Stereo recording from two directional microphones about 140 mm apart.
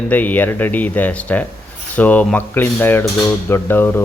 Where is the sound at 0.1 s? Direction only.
10° left (ahead or behind).